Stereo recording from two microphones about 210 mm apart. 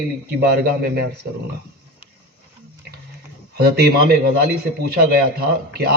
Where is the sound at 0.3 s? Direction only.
45° right (ahead or behind).